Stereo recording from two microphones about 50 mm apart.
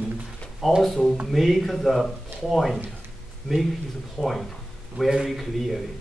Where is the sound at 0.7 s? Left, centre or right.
Centre.